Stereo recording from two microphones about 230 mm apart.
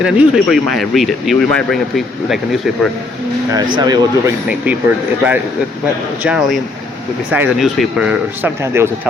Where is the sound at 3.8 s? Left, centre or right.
Centre.